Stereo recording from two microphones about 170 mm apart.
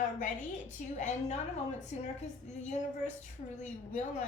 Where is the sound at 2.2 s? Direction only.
45° left (ahead or behind).